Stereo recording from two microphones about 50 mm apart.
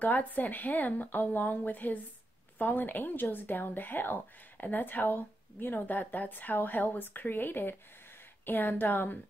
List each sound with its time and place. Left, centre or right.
0.0 s a woman's voice: left